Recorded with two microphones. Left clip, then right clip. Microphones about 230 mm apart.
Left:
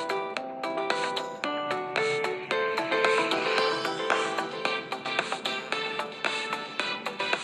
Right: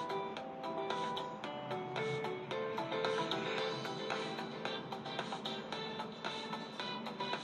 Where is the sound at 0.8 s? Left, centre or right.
Left.